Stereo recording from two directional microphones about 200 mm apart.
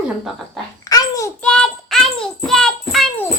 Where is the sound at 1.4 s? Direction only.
5° left (ahead or behind).